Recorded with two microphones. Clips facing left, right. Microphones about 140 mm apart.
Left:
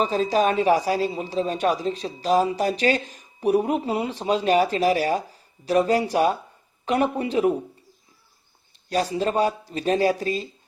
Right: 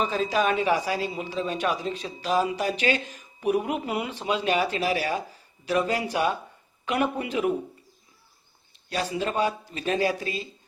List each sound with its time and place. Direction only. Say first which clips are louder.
0.0 s speech: left 4 dB; 40° left (ahead or behind)
8.9 s speech: left 5 dB; 40° left (ahead or behind)